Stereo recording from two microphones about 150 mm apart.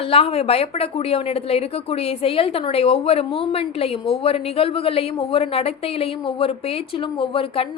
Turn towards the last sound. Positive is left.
turn(degrees=40)  # may be behind; listen again after turning